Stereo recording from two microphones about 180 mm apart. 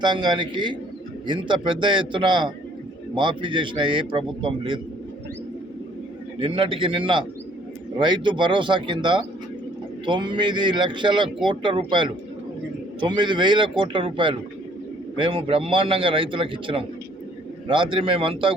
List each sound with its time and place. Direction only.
0.0 s a man's voice: 25° right (ahead or behind)
6.4 s a man's voice: 30° right (ahead or behind)